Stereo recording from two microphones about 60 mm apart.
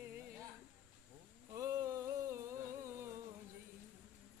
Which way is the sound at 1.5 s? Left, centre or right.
Right.